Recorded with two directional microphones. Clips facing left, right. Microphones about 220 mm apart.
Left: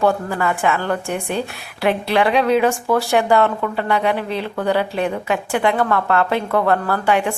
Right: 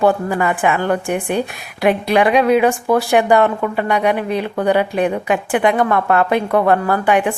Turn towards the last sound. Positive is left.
turn(degrees=-15)  # may be behind; listen again after turning